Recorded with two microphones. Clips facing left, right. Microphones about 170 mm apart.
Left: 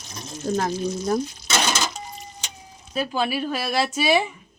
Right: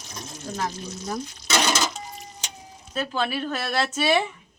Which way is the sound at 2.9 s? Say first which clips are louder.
Left 2 dB; 10° left (ahead or behind).